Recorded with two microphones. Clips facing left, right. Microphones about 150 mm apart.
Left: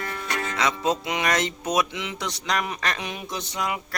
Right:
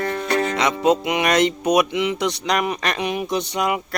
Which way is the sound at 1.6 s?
65° right (ahead or behind).